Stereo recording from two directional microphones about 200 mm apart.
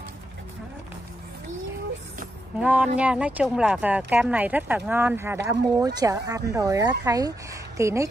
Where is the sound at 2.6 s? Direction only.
5° right (ahead or behind).